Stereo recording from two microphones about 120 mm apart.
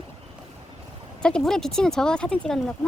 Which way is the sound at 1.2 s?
5° left (ahead or behind).